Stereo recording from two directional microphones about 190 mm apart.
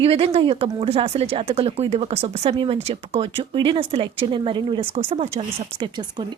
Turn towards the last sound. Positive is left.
turn(degrees=-20)  # may be behind; listen again after turning